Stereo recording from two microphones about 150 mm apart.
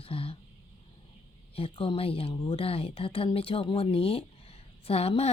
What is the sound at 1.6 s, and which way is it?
Speech, 35° left (ahead or behind).